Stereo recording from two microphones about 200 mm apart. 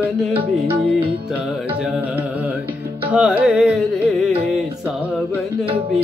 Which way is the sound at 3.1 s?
5° right (ahead or behind).